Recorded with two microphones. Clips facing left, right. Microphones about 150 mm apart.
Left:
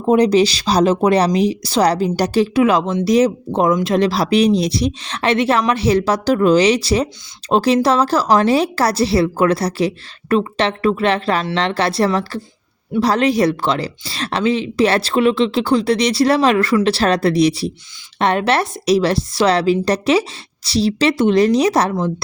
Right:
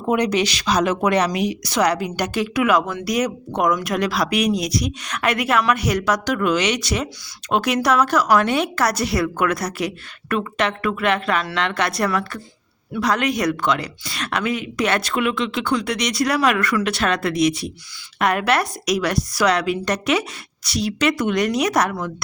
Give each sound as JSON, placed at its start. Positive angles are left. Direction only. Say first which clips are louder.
{"t": 0.0, "sound": "a woman's voice", "louder": "left 7 dB", "side_deg": 30}